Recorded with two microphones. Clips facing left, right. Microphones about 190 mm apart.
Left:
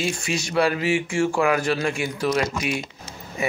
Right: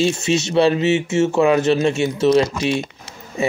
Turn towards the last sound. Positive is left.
turn(degrees=-25)  # may be behind; listen again after turning